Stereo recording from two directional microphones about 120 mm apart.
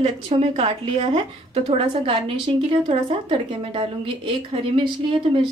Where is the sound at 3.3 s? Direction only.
45° right (ahead or behind).